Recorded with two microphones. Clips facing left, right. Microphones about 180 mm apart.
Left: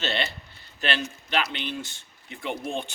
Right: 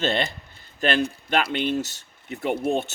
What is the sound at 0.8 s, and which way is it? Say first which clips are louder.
Speech: right 6 dB; 45° right (ahead or behind).